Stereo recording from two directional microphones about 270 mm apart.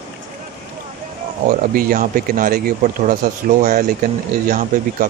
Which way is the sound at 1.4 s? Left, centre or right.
Right.